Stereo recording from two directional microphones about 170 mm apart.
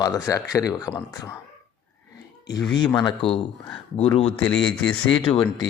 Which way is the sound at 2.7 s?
25° left (ahead or behind).